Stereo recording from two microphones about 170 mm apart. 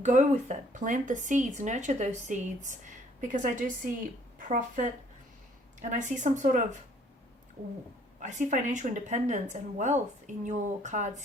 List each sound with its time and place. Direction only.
0.0 s speech: 45° right (ahead or behind)
8.2 s speech: 45° right (ahead or behind)